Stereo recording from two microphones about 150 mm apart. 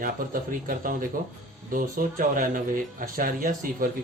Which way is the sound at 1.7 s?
65° right (ahead or behind).